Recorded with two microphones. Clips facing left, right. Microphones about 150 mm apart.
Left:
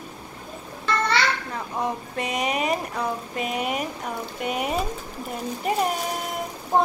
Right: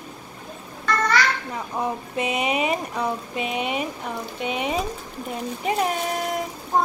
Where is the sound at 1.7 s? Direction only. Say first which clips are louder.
Right 1 dB; 5° right (ahead or behind).